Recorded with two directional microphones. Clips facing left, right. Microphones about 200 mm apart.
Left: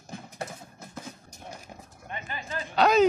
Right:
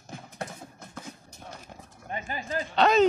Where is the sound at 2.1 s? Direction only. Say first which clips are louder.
Right 4 dB; 40° right (ahead or behind).